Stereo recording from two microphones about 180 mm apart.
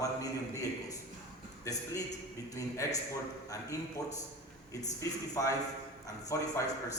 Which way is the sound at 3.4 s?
20° left (ahead or behind).